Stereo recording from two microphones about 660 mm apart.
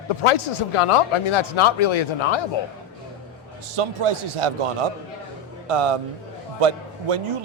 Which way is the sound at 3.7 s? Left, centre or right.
Right.